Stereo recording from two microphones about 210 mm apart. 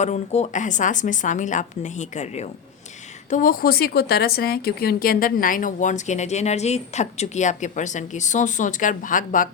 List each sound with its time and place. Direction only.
0.0 s speech: 35° left (ahead or behind)